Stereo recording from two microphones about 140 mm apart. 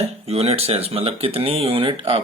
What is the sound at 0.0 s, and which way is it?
Speech, 45° right (ahead or behind).